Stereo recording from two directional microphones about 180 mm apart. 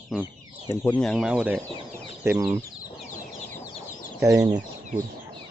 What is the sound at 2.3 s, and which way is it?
Speech, 15° right (ahead or behind).